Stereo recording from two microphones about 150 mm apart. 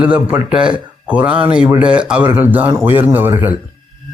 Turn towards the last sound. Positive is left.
turn(degrees=-15)  # may be behind; listen again after turning